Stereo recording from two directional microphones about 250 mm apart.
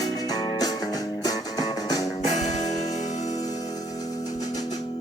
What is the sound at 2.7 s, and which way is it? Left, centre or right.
Music, left.